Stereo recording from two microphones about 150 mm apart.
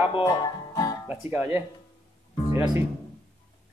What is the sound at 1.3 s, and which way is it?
Speech, 15° right (ahead or behind).